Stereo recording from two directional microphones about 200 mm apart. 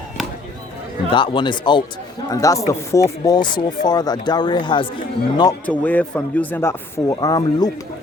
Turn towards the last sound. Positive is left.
turn(degrees=20)  # may be behind; listen again after turning